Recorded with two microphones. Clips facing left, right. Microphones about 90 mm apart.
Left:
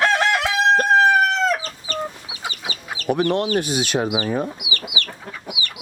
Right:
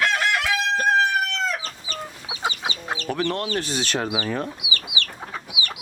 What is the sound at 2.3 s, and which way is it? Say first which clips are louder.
Chicken: right 4 dB; 30° right (ahead or behind).